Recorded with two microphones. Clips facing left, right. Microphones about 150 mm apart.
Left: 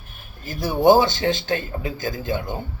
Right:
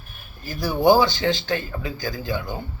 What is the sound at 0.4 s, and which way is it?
A man's voice, 20° left (ahead or behind).